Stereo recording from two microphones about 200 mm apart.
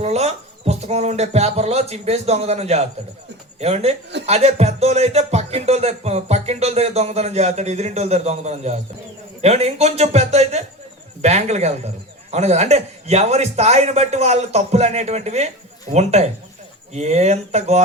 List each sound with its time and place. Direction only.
0.0 s a man's voice: 30° right (ahead or behind)